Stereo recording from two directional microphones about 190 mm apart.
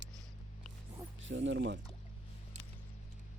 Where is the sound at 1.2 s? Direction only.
75° right (ahead or behind).